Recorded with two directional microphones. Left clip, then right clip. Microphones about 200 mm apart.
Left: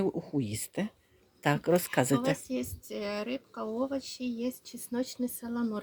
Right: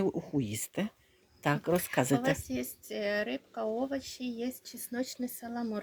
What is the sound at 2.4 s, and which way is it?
Speech, 45° left (ahead or behind).